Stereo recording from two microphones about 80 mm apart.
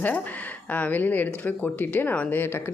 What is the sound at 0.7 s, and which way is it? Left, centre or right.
A woman's voice, left.